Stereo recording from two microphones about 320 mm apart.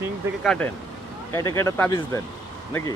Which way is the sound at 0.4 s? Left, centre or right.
Centre.